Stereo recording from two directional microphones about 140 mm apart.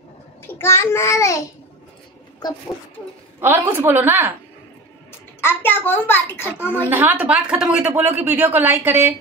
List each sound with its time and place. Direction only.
0.5 s a child's voice: 15° left (ahead or behind)
3.3 s speech: 15° right (ahead or behind)
5.4 s a child's voice: 15° left (ahead or behind)
6.9 s speech: 15° right (ahead or behind)